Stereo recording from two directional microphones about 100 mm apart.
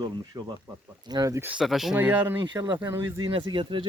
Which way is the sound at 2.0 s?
15° right (ahead or behind).